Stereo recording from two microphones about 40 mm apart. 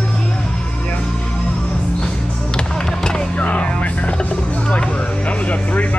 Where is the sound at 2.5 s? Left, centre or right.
Centre.